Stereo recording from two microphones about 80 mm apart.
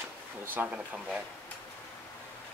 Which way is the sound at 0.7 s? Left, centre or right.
Centre.